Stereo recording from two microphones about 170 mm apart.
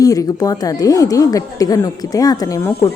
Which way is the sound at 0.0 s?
20° left (ahead or behind).